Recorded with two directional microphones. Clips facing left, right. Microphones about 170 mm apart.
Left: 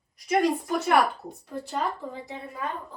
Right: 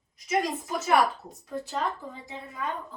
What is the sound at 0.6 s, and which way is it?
Speech, centre (ahead or behind).